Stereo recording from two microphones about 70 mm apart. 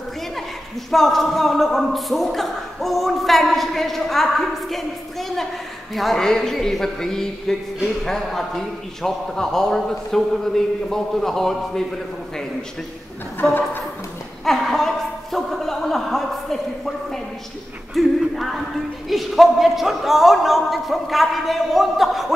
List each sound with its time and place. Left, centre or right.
0.9 s a man's voice: centre
5.9 s speech: centre
13.4 s a woman's voice: left
14.4 s chuckle: centre
17.9 s a sound: centre
19.0 s a man's voice: centre